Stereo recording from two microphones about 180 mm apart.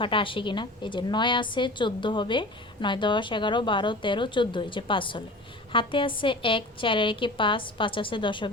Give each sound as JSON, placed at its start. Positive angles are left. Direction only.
{"t": 0.0, "sound": "a woman's voice", "side_deg": 30}